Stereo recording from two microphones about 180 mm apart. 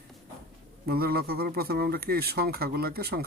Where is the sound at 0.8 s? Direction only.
60° right (ahead or behind).